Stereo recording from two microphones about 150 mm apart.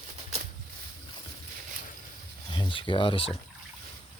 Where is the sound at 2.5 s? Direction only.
35° left (ahead or behind).